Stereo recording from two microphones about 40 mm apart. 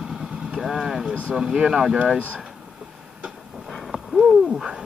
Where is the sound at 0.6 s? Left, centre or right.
Centre.